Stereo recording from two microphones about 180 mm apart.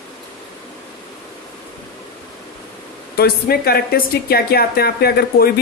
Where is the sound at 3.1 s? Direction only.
60° left (ahead or behind).